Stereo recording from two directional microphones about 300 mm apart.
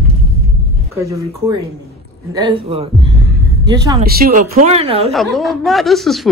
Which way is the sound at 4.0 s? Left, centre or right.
Right.